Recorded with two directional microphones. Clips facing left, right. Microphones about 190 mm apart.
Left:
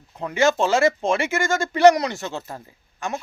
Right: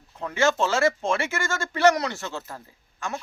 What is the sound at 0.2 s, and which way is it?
A man's voice, 15° left (ahead or behind).